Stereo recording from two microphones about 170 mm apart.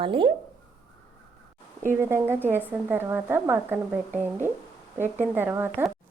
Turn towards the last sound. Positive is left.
turn(degrees=-10)  # may be behind; listen again after turning